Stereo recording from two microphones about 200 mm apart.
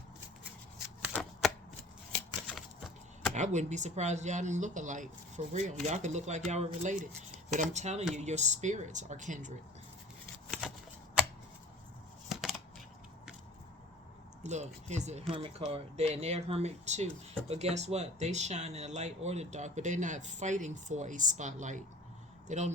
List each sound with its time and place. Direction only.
1.1 s shuffling cards: centre (ahead or behind)
3.3 s speech: 35° right (ahead or behind)
12.3 s scissors: centre (ahead or behind)
14.4 s speech: 35° right (ahead or behind)